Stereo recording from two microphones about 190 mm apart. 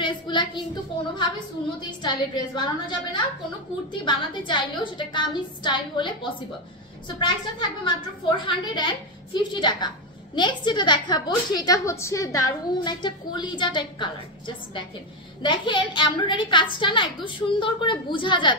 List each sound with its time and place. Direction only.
0.0 s a sound: 25° left (ahead or behind)
1.8 s a woman's voice: 25° left (ahead or behind)
15.4 s a woman's voice: 25° left (ahead or behind)